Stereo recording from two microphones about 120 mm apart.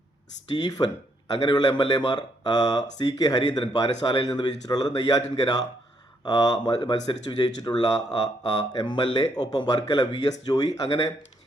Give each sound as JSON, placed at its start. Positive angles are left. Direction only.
{"t": 0.5, "sound": "speech", "side_deg": 35}